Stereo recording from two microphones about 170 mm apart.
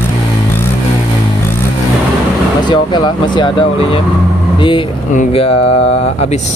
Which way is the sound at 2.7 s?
25° left (ahead or behind).